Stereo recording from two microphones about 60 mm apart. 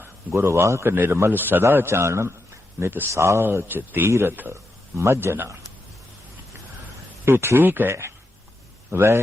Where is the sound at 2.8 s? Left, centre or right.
Right.